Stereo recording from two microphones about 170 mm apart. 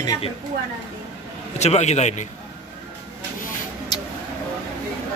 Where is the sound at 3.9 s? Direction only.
25° left (ahead or behind).